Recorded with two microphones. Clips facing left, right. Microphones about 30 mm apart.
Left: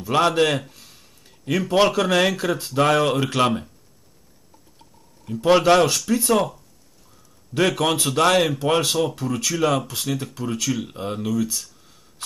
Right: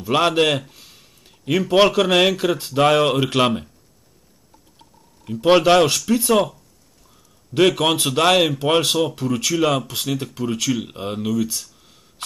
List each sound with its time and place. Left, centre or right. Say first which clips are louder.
0.0 s a sound: right 1 dB; right
1.7 s speech: right 3 dB; centre
5.2 s speech: right 2 dB; right
7.5 s speech: right 4 dB; right